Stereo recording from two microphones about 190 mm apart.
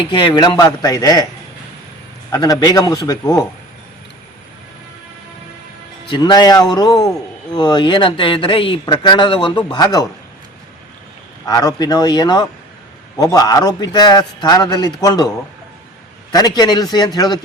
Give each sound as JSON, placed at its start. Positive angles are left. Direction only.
{"t": 0.1, "sound": "speech", "side_deg": 25}
{"t": 2.3, "sound": "speech", "side_deg": 20}
{"t": 6.1, "sound": "speech", "side_deg": 25}
{"t": 11.4, "sound": "speech", "side_deg": 20}
{"t": 16.3, "sound": "speech", "side_deg": 20}